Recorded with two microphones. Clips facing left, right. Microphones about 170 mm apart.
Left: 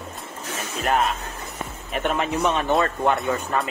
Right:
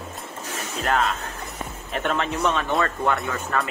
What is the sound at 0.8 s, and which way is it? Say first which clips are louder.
Speech: left 1 dB; 20° left (ahead or behind).